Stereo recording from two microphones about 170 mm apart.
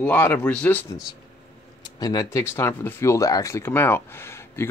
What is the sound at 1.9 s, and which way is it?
Speech, 20° left (ahead or behind).